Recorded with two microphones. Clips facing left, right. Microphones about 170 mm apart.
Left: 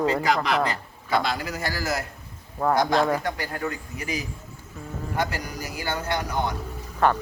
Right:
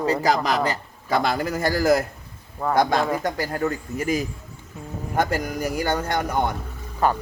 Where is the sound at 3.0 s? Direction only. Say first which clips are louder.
Left 1 dB; centre (ahead or behind).